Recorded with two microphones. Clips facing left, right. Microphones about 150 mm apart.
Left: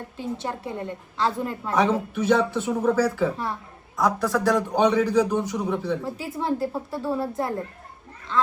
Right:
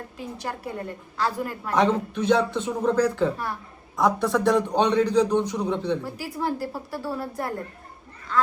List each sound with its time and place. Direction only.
0.2 s a woman's voice: 25° left (ahead or behind)
1.7 s speech: 5° left (ahead or behind)
3.3 s a woman's voice: 30° left (ahead or behind)
3.9 s a man's voice: centre (ahead or behind)
6.1 s a woman's voice: 25° left (ahead or behind)